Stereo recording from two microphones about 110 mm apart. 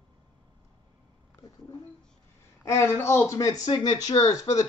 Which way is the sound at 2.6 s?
20° left (ahead or behind).